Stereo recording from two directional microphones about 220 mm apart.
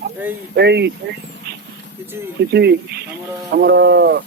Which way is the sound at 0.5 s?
50° right (ahead or behind).